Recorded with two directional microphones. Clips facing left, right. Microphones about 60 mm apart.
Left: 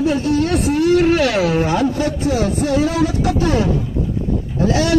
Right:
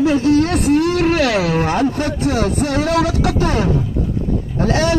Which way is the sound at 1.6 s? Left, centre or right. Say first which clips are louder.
Even; right.